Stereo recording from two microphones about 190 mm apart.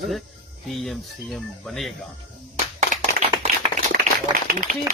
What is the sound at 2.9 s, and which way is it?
Clapping, 40° right (ahead or behind).